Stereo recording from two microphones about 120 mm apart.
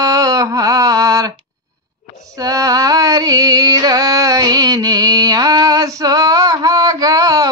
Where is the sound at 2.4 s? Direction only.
30° right (ahead or behind).